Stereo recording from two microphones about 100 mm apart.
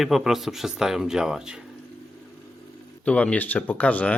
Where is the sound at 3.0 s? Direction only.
15° left (ahead or behind).